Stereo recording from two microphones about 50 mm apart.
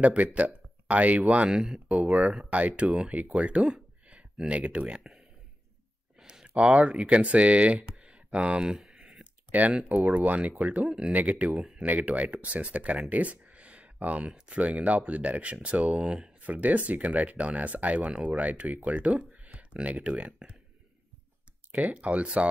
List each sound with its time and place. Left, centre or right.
0.0 s speech: right
1.5 s speech: centre
1.9 s speech: right
6.1 s speech: centre
8.0 s a sound: centre
8.6 s speech: centre
8.9 s a sound: right
10.0 s speech: right
10.9 s speech: centre
11.1 s speech: right
16.4 s speech: right
18.0 s speech: centre
18.3 s speech: right
21.9 s speech: right